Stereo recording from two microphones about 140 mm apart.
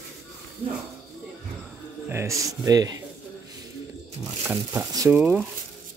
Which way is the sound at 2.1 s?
20° right (ahead or behind).